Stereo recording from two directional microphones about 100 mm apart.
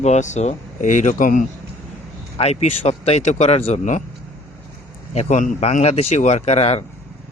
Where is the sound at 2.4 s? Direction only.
90° left.